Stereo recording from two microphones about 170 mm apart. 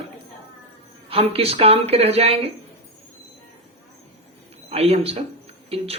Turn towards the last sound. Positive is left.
turn(degrees=-35)  # may be behind; listen again after turning